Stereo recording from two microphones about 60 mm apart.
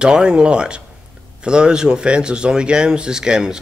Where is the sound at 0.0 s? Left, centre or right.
Centre.